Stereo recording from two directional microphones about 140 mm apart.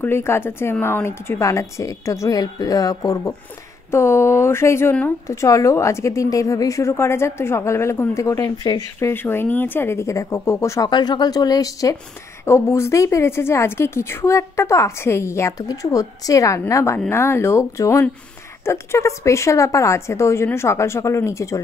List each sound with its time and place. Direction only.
0.0 s speech: 15° left (ahead or behind)
9.1 s speech: 15° left (ahead or behind)
10.9 s speech: 30° left (ahead or behind)